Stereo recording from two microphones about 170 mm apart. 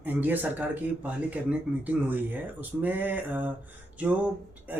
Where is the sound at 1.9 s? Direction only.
5° right (ahead or behind).